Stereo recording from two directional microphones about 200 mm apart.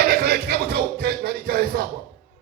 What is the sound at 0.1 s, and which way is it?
Music, 50° right (ahead or behind).